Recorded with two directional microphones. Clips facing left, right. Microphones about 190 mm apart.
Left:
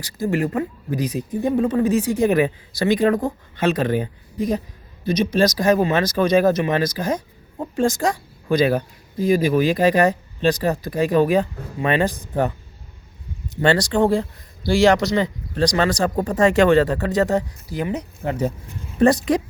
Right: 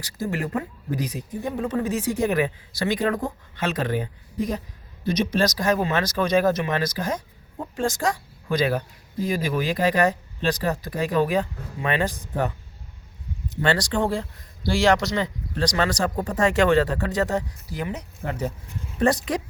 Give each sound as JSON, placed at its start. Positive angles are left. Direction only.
{"t": 0.0, "sound": "a woman's voice", "side_deg": 20}
{"t": 13.6, "sound": "speech", "side_deg": 20}